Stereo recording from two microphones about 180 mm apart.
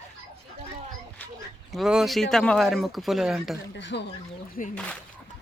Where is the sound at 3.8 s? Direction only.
75° left (ahead or behind).